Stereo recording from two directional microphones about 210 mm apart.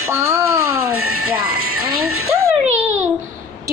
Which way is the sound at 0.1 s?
10° right (ahead or behind).